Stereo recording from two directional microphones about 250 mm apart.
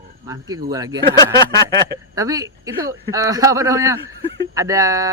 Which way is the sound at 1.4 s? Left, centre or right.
Centre.